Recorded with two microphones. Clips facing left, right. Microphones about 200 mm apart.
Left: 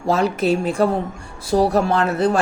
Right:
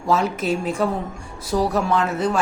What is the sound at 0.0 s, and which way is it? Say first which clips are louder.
Speech: left 3 dB; 35° left (ahead or behind).